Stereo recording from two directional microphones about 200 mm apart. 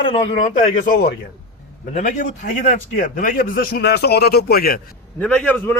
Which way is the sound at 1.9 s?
35° left (ahead or behind).